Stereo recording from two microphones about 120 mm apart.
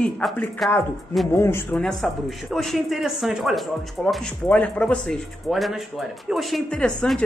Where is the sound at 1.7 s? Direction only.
5° left (ahead or behind).